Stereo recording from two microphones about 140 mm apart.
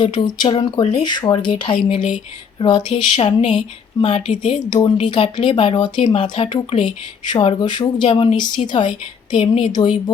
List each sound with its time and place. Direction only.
0.0 s speech: 35° left (ahead or behind)
2.0 s speech: 60° left (ahead or behind)
2.6 s speech: 35° left (ahead or behind)